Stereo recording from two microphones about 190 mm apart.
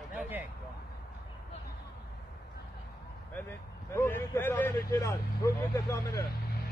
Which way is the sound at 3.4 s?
10° left (ahead or behind).